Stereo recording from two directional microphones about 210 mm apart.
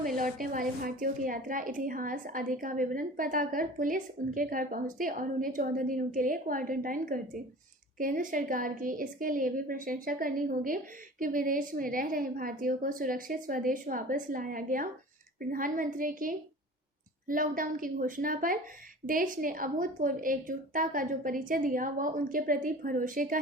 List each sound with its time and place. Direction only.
0.2 s a woman's voice: 40° right (ahead or behind)